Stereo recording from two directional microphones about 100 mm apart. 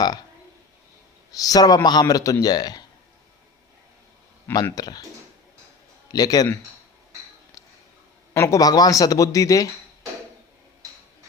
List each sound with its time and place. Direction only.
1.3 s speech: 35° left (ahead or behind)
4.7 s speech: 40° left (ahead or behind)
6.1 s a man's voice: 40° left (ahead or behind)
7.6 s a sound: 35° left (ahead or behind)
8.3 s speech: 30° left (ahead or behind)
10.8 s a sound: 35° right (ahead or behind)